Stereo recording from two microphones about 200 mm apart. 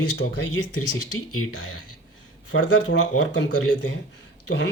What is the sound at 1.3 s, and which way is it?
Speech, 90° left.